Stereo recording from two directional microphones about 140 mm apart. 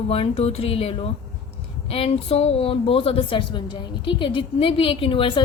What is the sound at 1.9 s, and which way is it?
A woman's voice, 45° left (ahead or behind).